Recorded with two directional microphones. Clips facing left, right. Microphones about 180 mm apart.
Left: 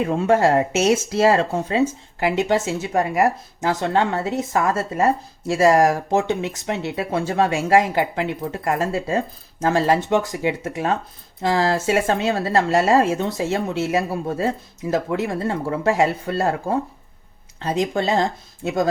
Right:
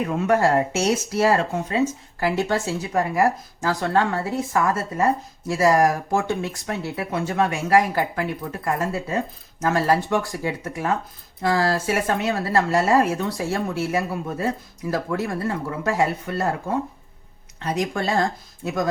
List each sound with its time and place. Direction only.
0.0 s speech: 30° left (ahead or behind)